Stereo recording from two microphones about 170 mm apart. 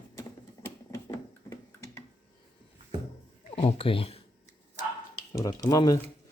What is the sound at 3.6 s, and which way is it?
Speech, 35° left (ahead or behind).